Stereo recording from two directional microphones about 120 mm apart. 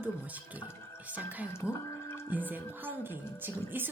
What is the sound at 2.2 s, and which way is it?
A woman's voice, 15° right (ahead or behind).